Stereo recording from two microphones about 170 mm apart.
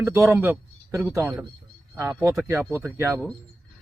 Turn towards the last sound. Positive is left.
turn(degrees=-15)  # may be behind; listen again after turning